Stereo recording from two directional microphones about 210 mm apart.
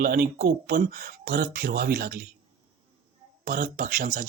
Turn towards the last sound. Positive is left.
turn(degrees=-40)  # may be behind; listen again after turning